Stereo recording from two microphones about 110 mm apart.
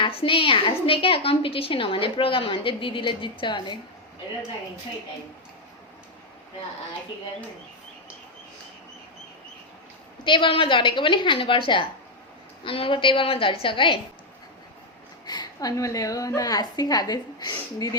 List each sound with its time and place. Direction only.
0.0 s a woman's voice: 55° left (ahead or behind)
10.2 s a woman's voice: 45° left (ahead or behind)
15.3 s a woman's voice: 35° left (ahead or behind)